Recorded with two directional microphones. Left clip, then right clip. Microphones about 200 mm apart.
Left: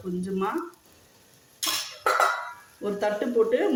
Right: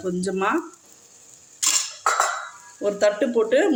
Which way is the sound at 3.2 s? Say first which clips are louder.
Right 6 dB; 50° right (ahead or behind).